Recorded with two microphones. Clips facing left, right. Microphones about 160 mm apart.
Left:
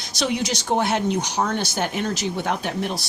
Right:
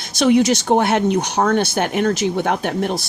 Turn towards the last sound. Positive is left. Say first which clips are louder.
# right 5 dB
turn(degrees=-55)  # may be behind; listen again after turning